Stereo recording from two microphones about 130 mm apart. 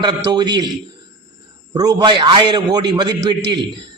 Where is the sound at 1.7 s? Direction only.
30° right (ahead or behind).